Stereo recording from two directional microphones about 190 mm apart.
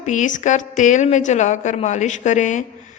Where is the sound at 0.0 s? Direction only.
40° left (ahead or behind).